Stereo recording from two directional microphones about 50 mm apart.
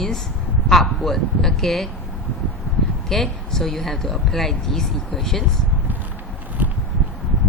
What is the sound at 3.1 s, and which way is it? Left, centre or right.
Speech, centre.